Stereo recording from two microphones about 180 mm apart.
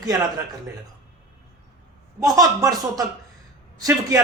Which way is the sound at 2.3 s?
20° right (ahead or behind).